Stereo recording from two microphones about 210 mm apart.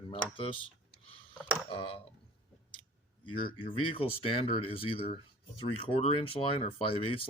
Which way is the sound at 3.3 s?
25° left (ahead or behind).